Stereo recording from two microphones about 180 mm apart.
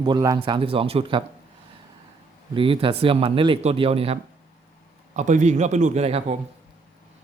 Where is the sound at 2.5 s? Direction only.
30° right (ahead or behind).